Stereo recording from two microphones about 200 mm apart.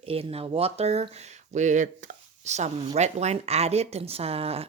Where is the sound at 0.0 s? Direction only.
30° right (ahead or behind).